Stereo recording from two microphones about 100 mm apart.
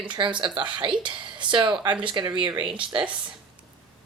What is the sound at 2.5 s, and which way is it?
Speech, 15° right (ahead or behind).